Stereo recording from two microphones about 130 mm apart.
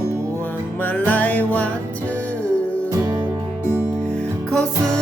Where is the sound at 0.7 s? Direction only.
15° left (ahead or behind).